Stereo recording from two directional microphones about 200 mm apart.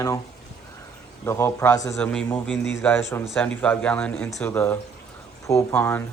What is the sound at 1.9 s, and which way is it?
Speech, 5° left (ahead or behind).